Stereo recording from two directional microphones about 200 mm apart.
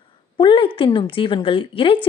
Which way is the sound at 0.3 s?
25° left (ahead or behind).